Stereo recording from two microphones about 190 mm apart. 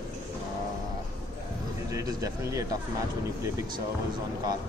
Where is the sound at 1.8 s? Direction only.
15° right (ahead or behind).